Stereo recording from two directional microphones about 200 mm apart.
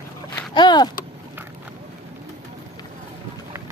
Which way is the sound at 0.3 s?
20° left (ahead or behind).